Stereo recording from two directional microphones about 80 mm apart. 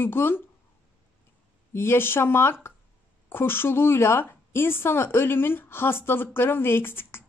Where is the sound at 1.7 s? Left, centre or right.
Left.